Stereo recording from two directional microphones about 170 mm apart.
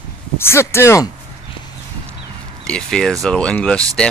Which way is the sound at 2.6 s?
5° left (ahead or behind).